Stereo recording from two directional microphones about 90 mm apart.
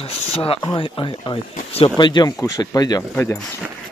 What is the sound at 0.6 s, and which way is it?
Speech, 60° left (ahead or behind).